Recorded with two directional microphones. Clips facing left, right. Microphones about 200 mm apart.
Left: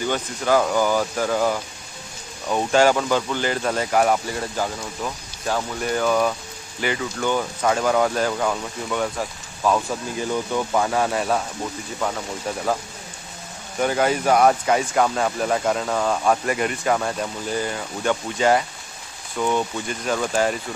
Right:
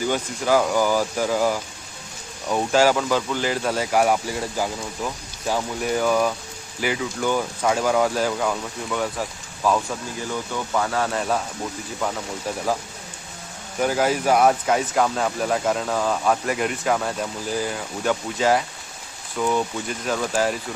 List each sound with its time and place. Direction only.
0.1 s speech: 5° right (ahead or behind)
10.3 s speech: 15° left (ahead or behind)
13.7 s speech: centre (ahead or behind)